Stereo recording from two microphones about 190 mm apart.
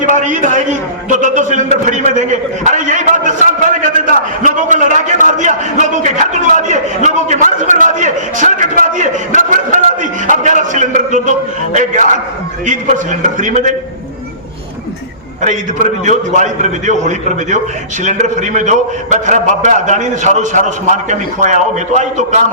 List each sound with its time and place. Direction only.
0.0 s a sound: 40° right (ahead or behind)
4.4 s a man's voice: 40° right (ahead or behind)
15.4 s a man's voice: 40° right (ahead or behind)